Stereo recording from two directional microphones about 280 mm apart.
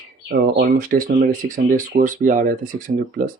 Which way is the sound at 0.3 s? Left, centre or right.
Right.